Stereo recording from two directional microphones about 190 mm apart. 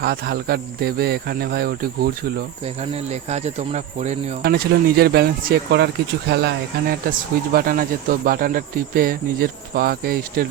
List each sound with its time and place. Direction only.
0.0 s speech: 55° right (ahead or behind)
2.9 s speech: 35° right (ahead or behind)
4.4 s speech: 55° right (ahead or behind)